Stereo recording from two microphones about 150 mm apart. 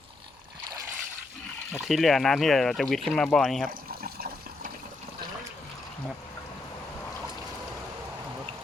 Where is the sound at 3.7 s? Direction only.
75° right (ahead or behind).